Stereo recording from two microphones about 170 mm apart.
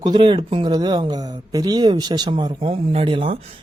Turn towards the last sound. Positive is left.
turn(degrees=-30)  # may be behind; listen again after turning